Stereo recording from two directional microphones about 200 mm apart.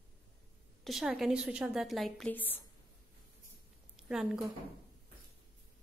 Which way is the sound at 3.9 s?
5° right (ahead or behind).